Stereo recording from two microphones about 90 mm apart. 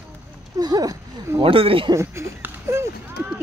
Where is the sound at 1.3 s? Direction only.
85° right.